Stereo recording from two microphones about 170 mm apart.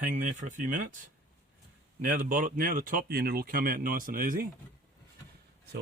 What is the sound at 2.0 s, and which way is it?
Speech, 55° right (ahead or behind).